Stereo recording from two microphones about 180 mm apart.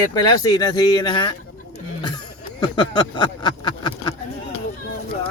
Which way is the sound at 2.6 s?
25° left (ahead or behind).